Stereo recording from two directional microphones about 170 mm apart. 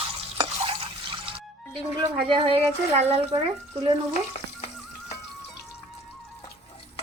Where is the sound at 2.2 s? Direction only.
30° right (ahead or behind).